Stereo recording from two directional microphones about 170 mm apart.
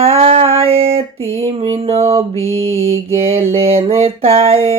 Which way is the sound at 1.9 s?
35° right (ahead or behind).